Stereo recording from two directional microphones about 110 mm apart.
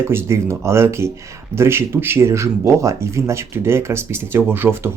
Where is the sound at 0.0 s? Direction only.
25° right (ahead or behind).